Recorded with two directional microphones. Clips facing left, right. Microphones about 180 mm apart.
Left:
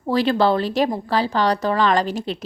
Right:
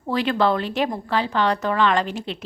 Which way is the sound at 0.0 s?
35° left (ahead or behind).